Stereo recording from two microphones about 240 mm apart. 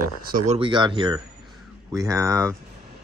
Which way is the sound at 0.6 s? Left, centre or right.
Centre.